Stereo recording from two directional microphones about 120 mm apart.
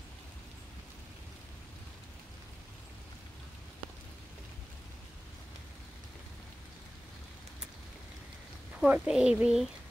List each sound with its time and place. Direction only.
8.8 s speech: 10° right (ahead or behind)